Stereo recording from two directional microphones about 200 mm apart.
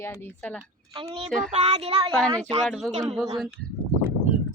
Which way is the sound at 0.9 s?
25° right (ahead or behind).